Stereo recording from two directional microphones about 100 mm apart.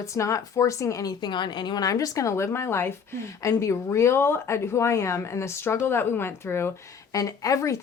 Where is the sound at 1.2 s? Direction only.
50° left (ahead or behind); by 6.7 s 25° left (ahead or behind).